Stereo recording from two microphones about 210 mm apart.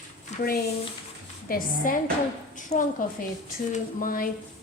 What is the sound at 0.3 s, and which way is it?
A woman's voice, 45° left (ahead or behind).